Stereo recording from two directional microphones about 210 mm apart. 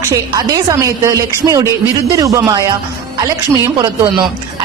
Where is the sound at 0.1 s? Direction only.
15° right (ahead or behind).